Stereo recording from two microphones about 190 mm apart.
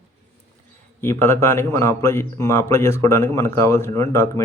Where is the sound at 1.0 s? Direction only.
10° left (ahead or behind).